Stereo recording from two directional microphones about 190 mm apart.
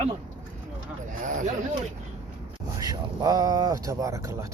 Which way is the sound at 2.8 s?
20° right (ahead or behind).